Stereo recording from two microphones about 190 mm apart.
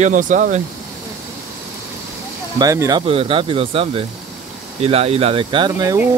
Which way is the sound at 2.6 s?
15° right (ahead or behind).